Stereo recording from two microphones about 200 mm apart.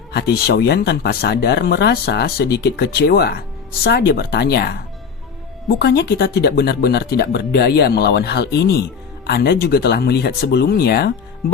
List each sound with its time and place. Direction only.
0.1 s speech: 50° left (ahead or behind)